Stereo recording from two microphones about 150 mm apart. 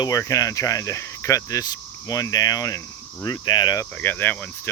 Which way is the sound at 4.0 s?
10° left (ahead or behind).